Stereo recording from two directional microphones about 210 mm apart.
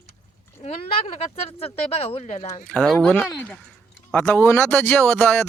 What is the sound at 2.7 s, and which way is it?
Speech, 5° left (ahead or behind).